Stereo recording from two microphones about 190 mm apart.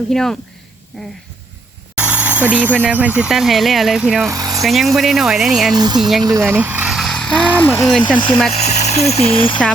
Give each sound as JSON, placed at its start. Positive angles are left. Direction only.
{"t": 0.1, "sound": "speech", "side_deg": 0}
{"t": 2.0, "sound": "a sound", "side_deg": -10}
{"t": 2.8, "sound": "speech", "side_deg": -10}
{"t": 4.3, "sound": "speech", "side_deg": -20}
{"t": 4.6, "sound": "speech", "side_deg": 0}
{"t": 5.7, "sound": "speech", "side_deg": -20}
{"t": 6.0, "sound": "speech", "side_deg": 0}
{"t": 6.2, "sound": "speech", "side_deg": -15}
{"t": 8.6, "sound": "speech", "side_deg": 35}